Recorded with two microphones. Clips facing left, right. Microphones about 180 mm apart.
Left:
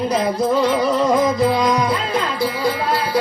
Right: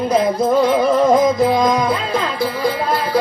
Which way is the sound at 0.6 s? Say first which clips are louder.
Right 3 dB; 50° right (ahead or behind).